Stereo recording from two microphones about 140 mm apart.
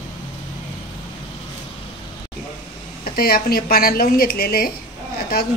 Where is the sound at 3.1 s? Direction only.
90° left.